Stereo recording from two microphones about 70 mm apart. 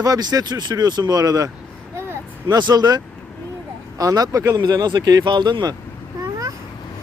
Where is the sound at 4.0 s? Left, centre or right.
Right.